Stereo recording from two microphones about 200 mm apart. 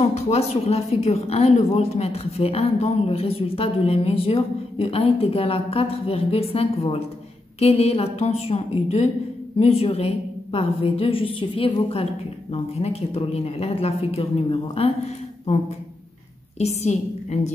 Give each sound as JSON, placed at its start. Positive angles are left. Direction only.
{"t": 0.0, "sound": "a woman's voice", "side_deg": 30}
{"t": 16.5, "sound": "a woman's voice", "side_deg": 35}